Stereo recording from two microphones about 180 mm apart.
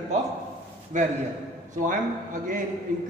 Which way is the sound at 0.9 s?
40° right (ahead or behind).